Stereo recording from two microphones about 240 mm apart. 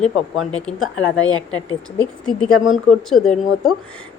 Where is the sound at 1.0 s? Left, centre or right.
Left.